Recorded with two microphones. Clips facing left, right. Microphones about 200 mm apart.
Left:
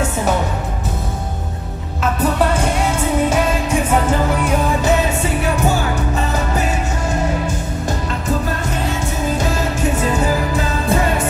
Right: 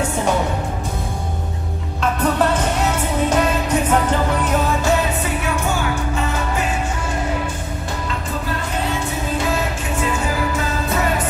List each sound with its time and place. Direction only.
2.1 s music: 10° left (ahead or behind)